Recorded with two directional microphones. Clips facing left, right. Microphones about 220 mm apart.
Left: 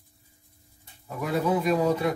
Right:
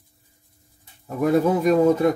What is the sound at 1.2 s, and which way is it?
Speech, 45° right (ahead or behind).